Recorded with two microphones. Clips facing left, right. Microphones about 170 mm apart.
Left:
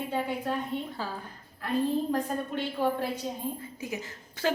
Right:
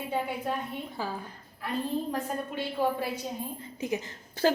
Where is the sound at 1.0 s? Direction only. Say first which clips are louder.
Right 1 dB; 10° right (ahead or behind).